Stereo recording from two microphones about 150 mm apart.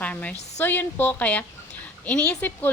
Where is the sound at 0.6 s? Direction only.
15° left (ahead or behind).